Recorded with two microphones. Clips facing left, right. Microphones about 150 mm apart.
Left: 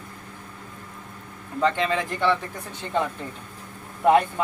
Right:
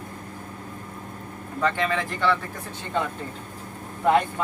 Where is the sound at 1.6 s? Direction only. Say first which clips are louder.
Left 2 dB; 20° left (ahead or behind).